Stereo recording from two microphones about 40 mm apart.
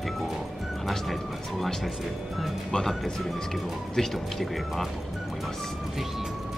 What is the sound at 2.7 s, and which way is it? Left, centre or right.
Speech, centre.